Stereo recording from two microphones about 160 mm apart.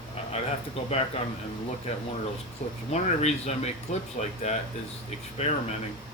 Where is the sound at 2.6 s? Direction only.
50° left (ahead or behind).